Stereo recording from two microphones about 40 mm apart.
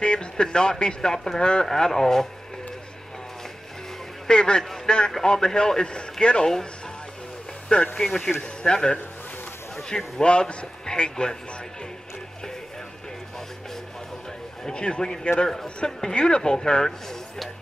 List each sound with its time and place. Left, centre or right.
0.0 s speech: left
1.7 s speech: centre
4.3 s speech: left
7.9 s speech: centre
9.9 s speech: left
14.6 s speech: left